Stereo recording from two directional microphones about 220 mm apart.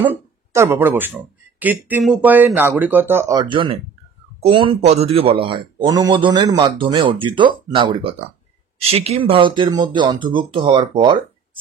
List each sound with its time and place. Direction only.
0.6 s a man's voice: 10° right (ahead or behind)